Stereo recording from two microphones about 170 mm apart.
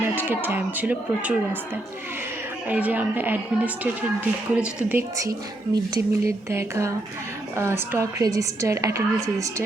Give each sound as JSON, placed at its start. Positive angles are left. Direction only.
{"t": 0.2, "sound": "a woman's voice", "side_deg": -10}
{"t": 2.6, "sound": "a woman's voice", "side_deg": -10}